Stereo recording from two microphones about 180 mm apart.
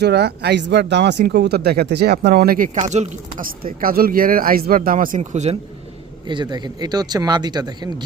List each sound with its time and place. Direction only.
0.0 s speech: 65° right (ahead or behind); by 5.5 s 40° right (ahead or behind)
6.2 s speech: 25° right (ahead or behind)